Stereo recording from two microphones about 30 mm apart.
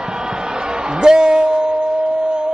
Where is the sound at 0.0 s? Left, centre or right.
Right.